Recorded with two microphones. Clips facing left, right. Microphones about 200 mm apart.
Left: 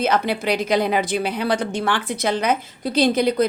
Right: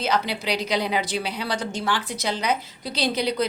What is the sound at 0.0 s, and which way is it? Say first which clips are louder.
Speech: left 5 dB; 55° left (ahead or behind).